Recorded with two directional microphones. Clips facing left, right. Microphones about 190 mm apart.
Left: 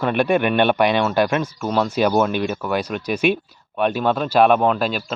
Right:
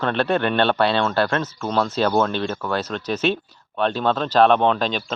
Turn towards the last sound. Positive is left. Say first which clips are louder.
# left 1 dB
turn(degrees=5)  # may be behind; listen again after turning